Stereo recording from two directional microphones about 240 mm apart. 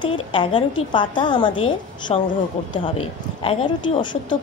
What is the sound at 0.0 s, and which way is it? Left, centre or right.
A woman's voice, left.